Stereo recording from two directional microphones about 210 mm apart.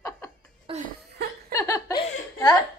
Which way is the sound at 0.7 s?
30° right (ahead or behind).